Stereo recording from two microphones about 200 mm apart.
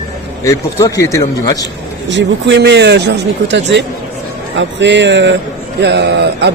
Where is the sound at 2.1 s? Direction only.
60° right (ahead or behind).